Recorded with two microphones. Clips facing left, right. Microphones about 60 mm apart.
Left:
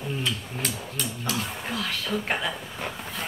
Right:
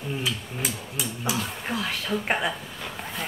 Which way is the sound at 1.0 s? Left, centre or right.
Centre.